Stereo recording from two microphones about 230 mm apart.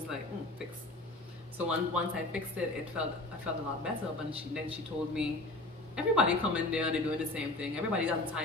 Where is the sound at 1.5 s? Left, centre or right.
Centre.